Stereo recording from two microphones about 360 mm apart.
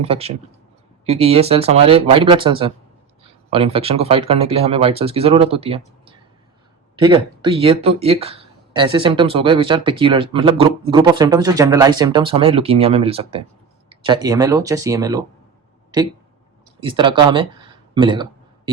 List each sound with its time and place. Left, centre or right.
0.0 s speech: centre
16.8 s speech: centre